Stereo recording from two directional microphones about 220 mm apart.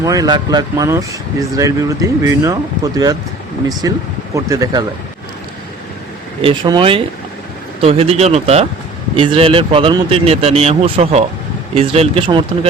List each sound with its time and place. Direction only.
0.0 s speech: 15° right (ahead or behind)
6.4 s a man's voice: 20° right (ahead or behind)